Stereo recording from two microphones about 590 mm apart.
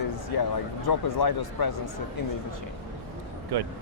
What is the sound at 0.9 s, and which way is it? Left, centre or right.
Speech, left.